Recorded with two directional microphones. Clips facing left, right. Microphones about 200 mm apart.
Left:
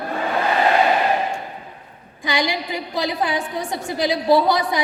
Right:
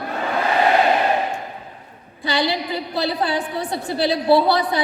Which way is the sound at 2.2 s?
15° left (ahead or behind).